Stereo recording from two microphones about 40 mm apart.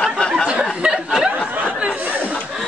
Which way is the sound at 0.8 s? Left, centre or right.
Centre.